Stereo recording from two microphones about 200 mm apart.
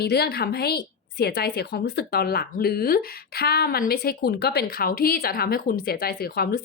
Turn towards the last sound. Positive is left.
turn(degrees=50)  # may be behind; listen again after turning